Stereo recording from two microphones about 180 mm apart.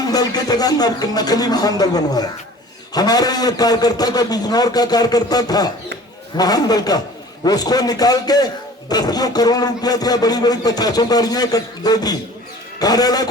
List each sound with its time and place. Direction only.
0.0 s a man's voice: 20° left (ahead or behind)